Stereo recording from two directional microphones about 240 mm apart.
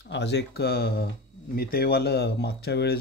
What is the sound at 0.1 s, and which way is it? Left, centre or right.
Speech, left.